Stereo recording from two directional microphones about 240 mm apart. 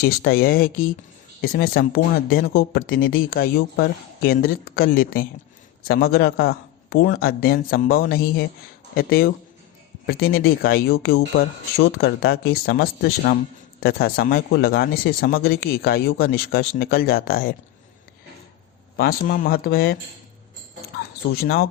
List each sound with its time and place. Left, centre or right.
0.0 s speech: left
18.9 s speech: left
21.4 s speech: left